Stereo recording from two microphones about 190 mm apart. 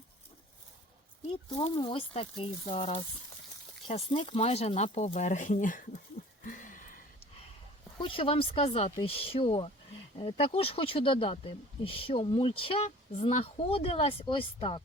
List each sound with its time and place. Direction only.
1.3 s speech: 30° left (ahead or behind); by 5.9 s 45° left (ahead or behind)
6.4 s a sound: 45° left (ahead or behind)
7.9 s speech: 30° left (ahead or behind)